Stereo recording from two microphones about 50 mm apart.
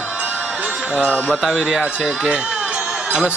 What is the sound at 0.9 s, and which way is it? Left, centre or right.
A man's voice, right.